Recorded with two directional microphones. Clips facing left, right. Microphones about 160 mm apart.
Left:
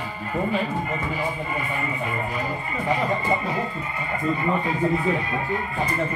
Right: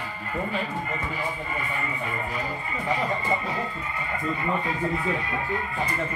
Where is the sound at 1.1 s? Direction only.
40° left (ahead or behind).